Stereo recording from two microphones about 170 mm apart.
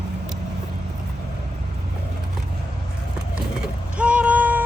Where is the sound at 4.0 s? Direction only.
5° right (ahead or behind).